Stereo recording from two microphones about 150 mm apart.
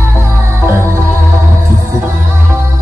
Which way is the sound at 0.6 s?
15° right (ahead or behind).